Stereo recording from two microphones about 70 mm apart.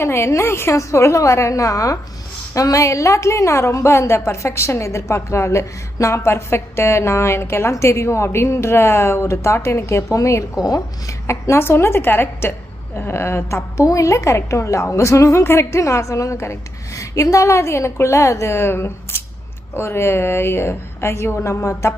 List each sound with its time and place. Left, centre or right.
0.0 s a woman's voice: left